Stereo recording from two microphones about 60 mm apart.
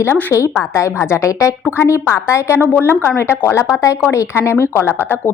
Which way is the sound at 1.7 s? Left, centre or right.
Left.